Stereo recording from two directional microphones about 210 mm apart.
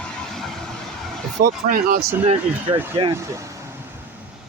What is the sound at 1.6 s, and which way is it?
Speech, 45° right (ahead or behind).